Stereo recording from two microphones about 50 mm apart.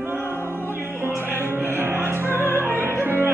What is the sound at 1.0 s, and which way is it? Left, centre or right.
Music, right.